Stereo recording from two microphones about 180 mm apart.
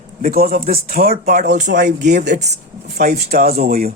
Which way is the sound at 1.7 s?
45° right (ahead or behind).